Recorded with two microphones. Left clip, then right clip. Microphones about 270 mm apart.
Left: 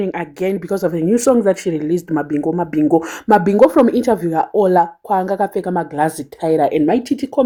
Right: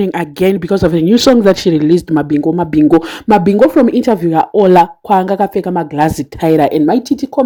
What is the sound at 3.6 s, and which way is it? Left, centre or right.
Speech, right.